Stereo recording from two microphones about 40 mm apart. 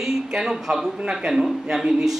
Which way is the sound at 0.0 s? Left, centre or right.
Centre.